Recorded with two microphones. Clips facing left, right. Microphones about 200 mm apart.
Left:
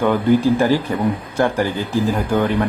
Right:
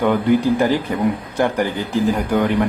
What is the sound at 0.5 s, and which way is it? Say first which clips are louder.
A man's voice: left 1 dB; 15° right (ahead or behind).